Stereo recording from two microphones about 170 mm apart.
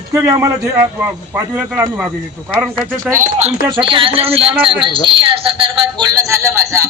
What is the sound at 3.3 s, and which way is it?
Speech, 35° right (ahead or behind).